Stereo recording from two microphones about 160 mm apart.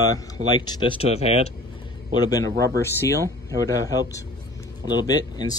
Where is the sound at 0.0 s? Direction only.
25° left (ahead or behind).